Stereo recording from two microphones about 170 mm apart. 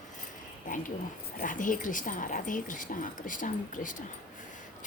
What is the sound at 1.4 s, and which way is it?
A woman's voice, 50° left (ahead or behind).